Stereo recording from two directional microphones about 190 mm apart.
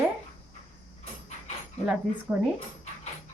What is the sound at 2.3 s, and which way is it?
Speech, 5° right (ahead or behind).